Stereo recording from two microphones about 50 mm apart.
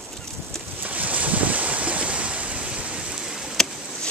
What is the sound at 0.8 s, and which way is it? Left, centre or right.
Waves, right.